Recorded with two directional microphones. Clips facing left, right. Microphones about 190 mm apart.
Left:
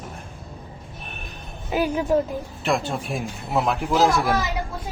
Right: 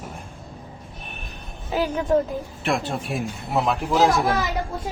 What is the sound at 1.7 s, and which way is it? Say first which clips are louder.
Speech: left 1 dB; 10° left (ahead or behind).